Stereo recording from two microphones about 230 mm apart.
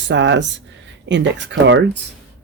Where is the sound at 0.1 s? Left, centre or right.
Right.